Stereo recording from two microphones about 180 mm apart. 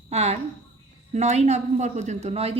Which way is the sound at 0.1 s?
35° right (ahead or behind).